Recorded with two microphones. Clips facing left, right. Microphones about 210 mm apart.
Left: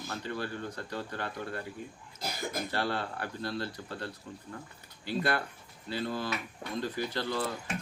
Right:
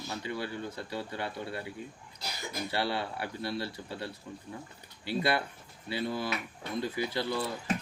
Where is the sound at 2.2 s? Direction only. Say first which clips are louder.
Left 3 dB; 50° left (ahead or behind).